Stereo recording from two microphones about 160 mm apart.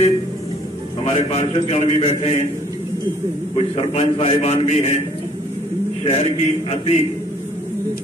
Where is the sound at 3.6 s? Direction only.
35° left (ahead or behind).